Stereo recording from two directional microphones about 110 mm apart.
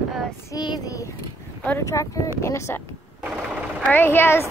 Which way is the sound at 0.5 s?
40° left (ahead or behind).